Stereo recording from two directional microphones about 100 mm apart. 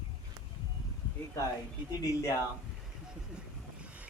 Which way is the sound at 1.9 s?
40° left (ahead or behind).